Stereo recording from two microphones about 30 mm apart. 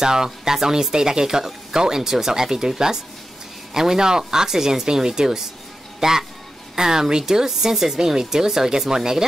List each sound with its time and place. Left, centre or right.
0.0 s speech: right
8.0 s speech: centre